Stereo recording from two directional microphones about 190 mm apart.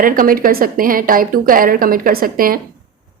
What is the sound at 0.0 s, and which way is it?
Speech, 50° right (ahead or behind).